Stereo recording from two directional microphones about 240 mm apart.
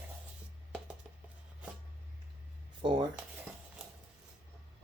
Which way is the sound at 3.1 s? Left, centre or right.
Centre.